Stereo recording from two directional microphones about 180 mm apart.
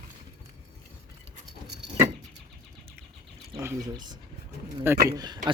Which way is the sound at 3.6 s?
25° right (ahead or behind).